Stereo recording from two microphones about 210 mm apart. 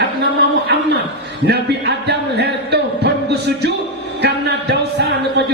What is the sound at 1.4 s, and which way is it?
Speech, 50° right (ahead or behind).